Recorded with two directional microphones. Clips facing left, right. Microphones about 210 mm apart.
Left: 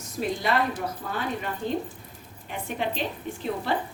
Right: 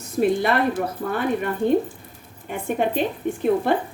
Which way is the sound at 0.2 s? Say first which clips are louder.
Right 7 dB; 60° right (ahead or behind).